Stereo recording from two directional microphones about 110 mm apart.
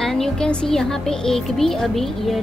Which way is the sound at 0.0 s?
5° left (ahead or behind).